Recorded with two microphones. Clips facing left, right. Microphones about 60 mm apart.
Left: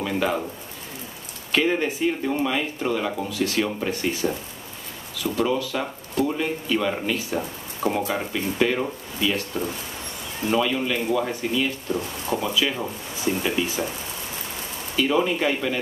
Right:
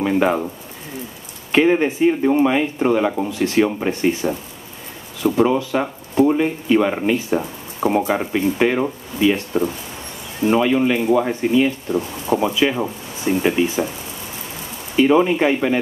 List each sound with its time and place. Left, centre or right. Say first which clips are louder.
0.0 s speech: right 7 dB; right
1.5 s speech: right 7 dB; right
7.3 s a sound: right 5 dB; right
8.3 s speech: right 5 dB; right
15.0 s speech: right 7 dB; right